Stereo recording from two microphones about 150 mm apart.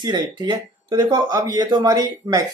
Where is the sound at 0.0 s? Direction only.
30° right (ahead or behind).